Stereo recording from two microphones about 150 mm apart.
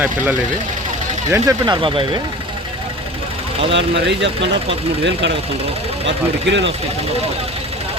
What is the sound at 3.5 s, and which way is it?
Speech, 40° right (ahead or behind).